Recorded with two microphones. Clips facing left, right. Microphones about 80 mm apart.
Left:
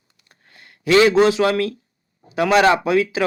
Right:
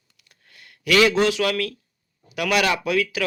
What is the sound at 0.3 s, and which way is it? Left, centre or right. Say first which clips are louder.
Speech: left 2 dB; left.